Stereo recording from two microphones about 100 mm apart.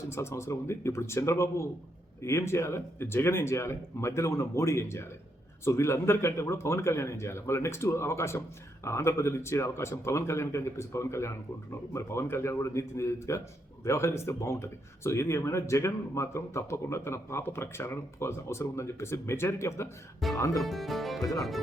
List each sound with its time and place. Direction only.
0.1 s speech: 25° left (ahead or behind)
20.2 s music: centre (ahead or behind)